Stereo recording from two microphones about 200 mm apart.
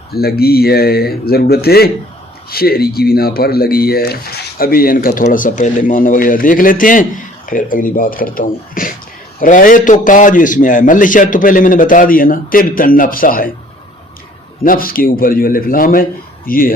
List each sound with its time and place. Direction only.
0.1 s a man's voice: 50° left (ahead or behind)
14.6 s speech: 45° left (ahead or behind)